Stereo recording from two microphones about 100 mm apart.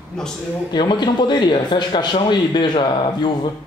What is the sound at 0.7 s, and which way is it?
Speech, 50° left (ahead or behind).